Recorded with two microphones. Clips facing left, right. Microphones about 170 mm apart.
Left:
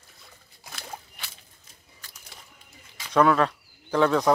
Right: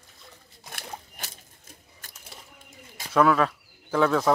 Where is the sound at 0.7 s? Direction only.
50° right (ahead or behind).